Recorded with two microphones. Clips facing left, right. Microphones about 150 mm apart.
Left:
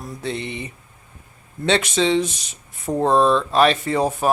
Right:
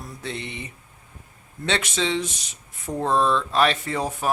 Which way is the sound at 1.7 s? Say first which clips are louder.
Left 6 dB; 30° left (ahead or behind).